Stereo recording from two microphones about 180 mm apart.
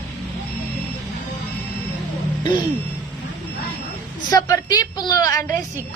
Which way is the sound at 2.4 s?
25° left (ahead or behind).